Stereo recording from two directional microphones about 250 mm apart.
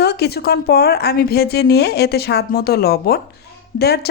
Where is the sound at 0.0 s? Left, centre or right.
Left.